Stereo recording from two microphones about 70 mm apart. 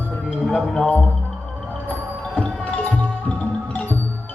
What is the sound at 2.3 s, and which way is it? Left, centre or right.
Music, centre.